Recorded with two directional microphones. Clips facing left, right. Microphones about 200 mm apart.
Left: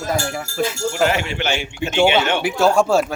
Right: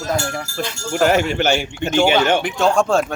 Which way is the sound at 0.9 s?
45° right (ahead or behind).